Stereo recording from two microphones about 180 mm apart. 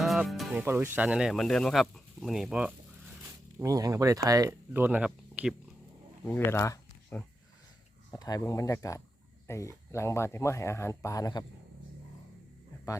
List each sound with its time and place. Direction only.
0.0 s music: centre (ahead or behind)
0.5 s speech: 10° right (ahead or behind)
3.6 s speech: 20° right (ahead or behind)
6.2 s speech: 10° left (ahead or behind)